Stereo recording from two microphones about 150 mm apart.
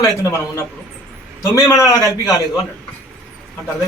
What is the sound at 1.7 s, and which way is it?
Speech, 20° left (ahead or behind).